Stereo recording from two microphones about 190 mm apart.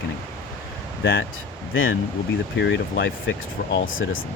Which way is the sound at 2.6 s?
70° left (ahead or behind).